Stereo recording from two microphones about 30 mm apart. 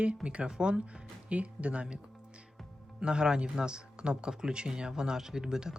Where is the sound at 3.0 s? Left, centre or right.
Right.